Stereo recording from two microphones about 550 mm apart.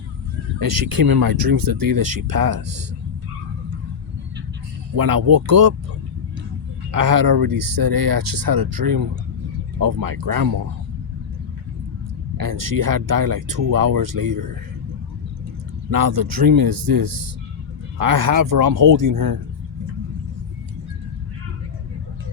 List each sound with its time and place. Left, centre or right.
0.6 s speech: right
4.9 s speech: right
6.9 s speech: right
12.4 s speech: right
15.9 s speech: right